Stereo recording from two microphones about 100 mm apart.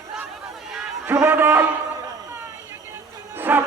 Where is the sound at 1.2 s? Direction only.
20° right (ahead or behind).